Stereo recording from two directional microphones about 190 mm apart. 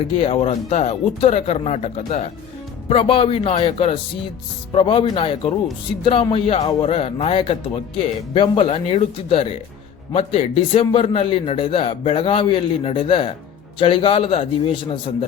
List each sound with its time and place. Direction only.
0.2 s a man's voice: 35° left (ahead or behind)